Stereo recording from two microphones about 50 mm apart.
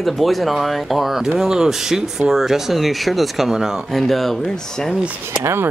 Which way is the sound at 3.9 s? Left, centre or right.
Centre.